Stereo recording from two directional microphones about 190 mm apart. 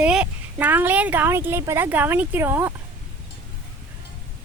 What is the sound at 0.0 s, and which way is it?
Speech, 5° right (ahead or behind).